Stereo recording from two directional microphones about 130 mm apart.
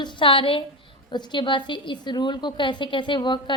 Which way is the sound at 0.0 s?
40° left (ahead or behind).